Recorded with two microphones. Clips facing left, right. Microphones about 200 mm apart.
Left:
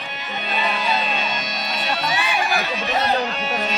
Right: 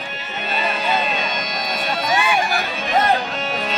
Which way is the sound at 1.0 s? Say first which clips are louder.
Right 2 dB; 50° right (ahead or behind).